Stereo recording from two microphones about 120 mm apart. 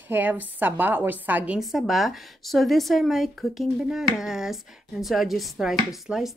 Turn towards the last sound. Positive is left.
turn(degrees=-5)  # may be behind; listen again after turning